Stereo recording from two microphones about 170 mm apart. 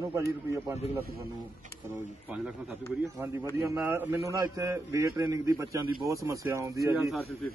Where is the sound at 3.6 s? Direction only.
15° right (ahead or behind).